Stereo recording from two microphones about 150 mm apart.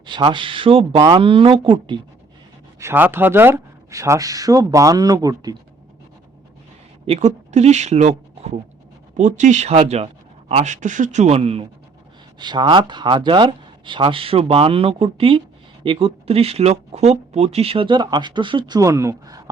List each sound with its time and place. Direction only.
0.0 s speech: 30° right (ahead or behind)
2.7 s speech: 15° right (ahead or behind)
7.1 s speech: 50° right (ahead or behind)
12.4 s speech: 30° right (ahead or behind)